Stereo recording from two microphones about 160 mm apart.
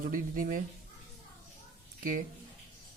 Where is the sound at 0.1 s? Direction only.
60° right (ahead or behind).